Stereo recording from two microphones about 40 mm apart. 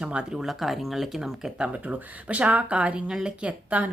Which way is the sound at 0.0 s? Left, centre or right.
Right.